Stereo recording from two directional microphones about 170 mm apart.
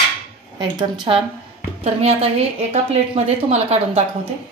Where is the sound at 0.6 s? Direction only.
30° right (ahead or behind).